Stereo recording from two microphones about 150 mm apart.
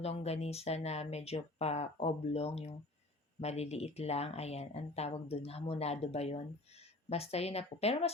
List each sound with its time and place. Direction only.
0.0 s speech: 45° left (ahead or behind)